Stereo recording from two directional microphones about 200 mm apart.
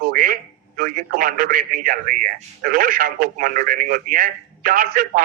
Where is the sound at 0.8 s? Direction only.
45° right (ahead or behind).